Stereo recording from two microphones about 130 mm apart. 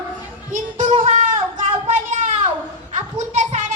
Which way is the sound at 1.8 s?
70° right (ahead or behind).